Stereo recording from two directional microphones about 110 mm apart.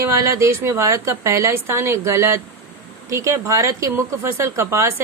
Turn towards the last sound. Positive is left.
turn(degrees=-25)  # may be behind; listen again after turning